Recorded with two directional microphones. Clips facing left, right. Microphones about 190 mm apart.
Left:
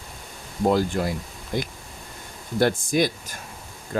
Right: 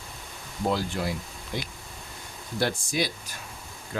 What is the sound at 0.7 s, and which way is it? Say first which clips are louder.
Speech: left 6 dB; 45° left (ahead or behind).